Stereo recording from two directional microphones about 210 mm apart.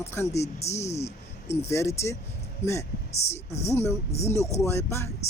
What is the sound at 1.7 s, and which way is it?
Speech, 15° left (ahead or behind).